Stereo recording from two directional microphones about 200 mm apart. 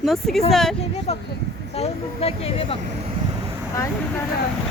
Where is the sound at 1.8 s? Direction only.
30° left (ahead or behind).